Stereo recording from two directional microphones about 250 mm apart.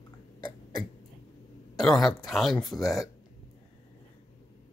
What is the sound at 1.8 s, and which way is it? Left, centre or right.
Speech, centre.